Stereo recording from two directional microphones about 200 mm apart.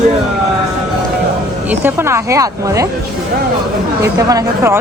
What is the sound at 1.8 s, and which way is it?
A woman's voice, 15° right (ahead or behind).